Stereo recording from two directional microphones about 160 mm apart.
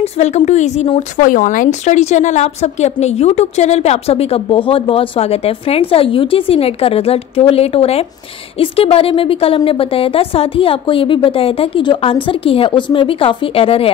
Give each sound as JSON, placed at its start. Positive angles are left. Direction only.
{"t": 0.0, "sound": "speech", "side_deg": 45}